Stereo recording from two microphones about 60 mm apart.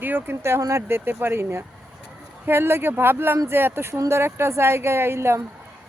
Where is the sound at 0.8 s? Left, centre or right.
Right.